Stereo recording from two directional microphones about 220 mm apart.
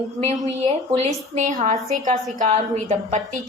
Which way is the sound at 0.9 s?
30° right (ahead or behind).